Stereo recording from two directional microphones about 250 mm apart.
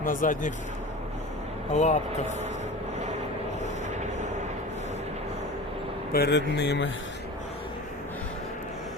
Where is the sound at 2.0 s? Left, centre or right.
Right.